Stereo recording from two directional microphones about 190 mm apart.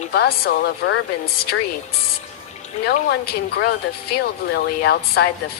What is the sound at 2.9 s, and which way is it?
A woman's voice, 55° left (ahead or behind).